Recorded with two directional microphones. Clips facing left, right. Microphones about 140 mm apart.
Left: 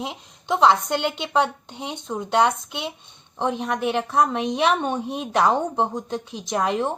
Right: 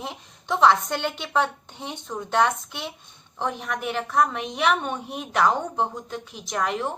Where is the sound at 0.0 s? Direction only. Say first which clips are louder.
Left 3 dB; 15° left (ahead or behind).